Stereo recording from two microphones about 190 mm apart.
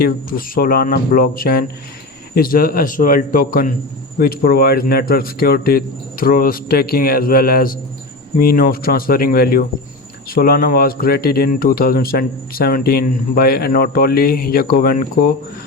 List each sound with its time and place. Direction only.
0.0 s speech: 50° left (ahead or behind)